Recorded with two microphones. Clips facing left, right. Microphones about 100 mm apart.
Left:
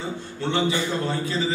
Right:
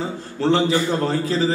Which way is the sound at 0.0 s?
35° right (ahead or behind).